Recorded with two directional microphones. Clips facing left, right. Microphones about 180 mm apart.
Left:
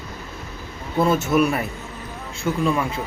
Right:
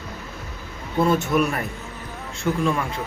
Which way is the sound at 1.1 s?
5° left (ahead or behind).